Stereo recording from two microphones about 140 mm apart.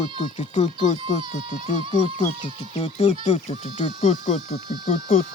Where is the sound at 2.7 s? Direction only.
50° left (ahead or behind).